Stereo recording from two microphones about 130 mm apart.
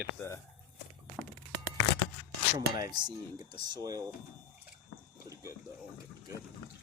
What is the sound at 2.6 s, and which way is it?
Speech, 30° right (ahead or behind).